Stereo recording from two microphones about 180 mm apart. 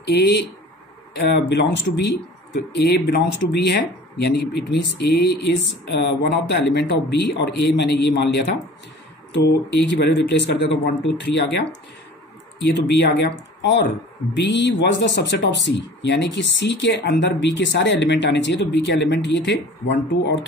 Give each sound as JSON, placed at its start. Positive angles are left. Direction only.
{"t": 0.0, "sound": "speech", "side_deg": 70}
{"t": 1.5, "sound": "speech", "side_deg": 75}